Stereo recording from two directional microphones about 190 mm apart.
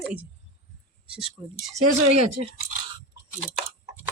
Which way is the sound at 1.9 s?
35° right (ahead or behind).